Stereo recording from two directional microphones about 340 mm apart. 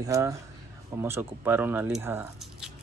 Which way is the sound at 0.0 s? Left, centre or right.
Centre.